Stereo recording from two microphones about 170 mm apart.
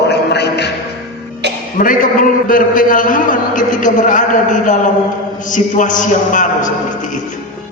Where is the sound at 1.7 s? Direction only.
55° left (ahead or behind).